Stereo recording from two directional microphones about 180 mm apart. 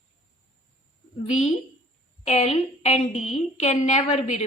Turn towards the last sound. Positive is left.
turn(degrees=40)  # may be behind; listen again after turning